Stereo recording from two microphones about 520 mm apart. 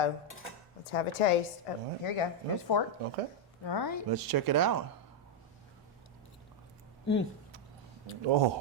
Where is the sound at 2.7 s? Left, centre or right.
Left.